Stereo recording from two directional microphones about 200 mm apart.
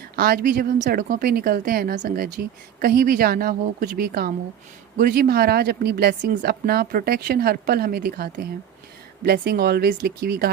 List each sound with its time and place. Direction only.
0.2 s speech: 50° right (ahead or behind)